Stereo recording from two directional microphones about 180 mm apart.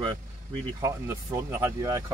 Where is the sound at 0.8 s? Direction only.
15° right (ahead or behind).